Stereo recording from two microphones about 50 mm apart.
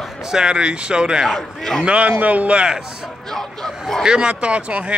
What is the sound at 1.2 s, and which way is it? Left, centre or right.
Speech, centre.